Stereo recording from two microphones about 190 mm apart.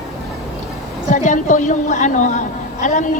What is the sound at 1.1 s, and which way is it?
A woman's voice, 40° left (ahead or behind).